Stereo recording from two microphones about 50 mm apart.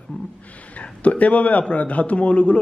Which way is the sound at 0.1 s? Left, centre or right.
Centre.